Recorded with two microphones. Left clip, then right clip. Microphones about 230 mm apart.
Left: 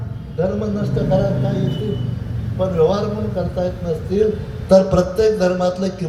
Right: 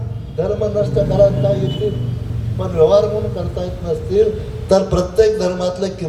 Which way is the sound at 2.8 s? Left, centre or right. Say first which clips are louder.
Right 6 dB; right.